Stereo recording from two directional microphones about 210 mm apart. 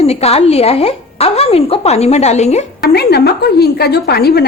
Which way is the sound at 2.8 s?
50° left (ahead or behind).